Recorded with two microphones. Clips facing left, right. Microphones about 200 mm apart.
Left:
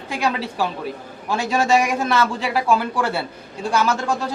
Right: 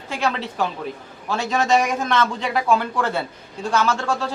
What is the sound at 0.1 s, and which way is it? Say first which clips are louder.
A man's voice: left 1 dB; 10° left (ahead or behind).